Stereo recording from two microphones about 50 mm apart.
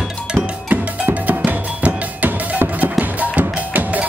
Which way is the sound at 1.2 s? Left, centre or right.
Right.